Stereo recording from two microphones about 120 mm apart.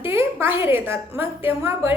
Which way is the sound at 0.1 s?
20° right (ahead or behind).